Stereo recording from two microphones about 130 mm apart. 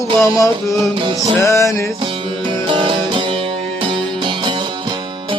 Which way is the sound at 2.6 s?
40° right (ahead or behind).